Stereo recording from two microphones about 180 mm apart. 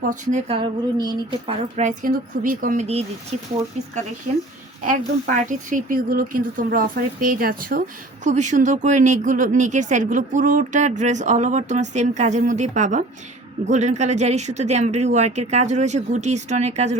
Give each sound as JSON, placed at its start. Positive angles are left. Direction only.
{"t": 0.1, "sound": "speech", "side_deg": -40}
{"t": 1.7, "sound": "speech", "side_deg": -45}
{"t": 4.9, "sound": "speech", "side_deg": -50}
{"t": 8.2, "sound": "speech", "side_deg": -40}